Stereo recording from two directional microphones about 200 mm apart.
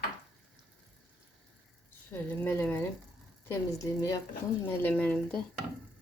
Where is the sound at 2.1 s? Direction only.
10° left (ahead or behind).